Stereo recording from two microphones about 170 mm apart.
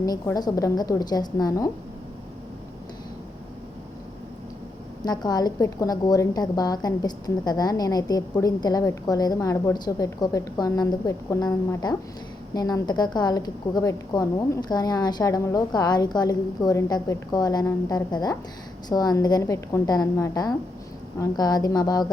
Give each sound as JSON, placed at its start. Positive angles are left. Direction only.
{"t": 0.0, "sound": "a woman's voice", "side_deg": 20}
{"t": 5.0, "sound": "a woman's voice", "side_deg": 25}